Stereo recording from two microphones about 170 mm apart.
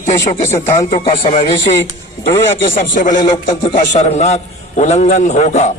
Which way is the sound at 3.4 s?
25° left (ahead or behind).